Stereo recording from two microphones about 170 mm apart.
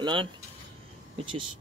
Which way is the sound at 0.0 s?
30° right (ahead or behind).